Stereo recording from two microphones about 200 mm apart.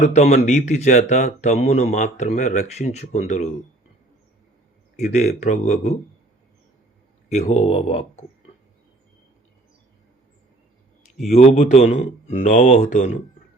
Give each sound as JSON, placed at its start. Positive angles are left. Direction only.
{"t": 0.0, "sound": "speech", "side_deg": 35}
{"t": 4.9, "sound": "speech", "side_deg": 35}
{"t": 7.3, "sound": "speech", "side_deg": 35}
{"t": 11.3, "sound": "speech", "side_deg": 35}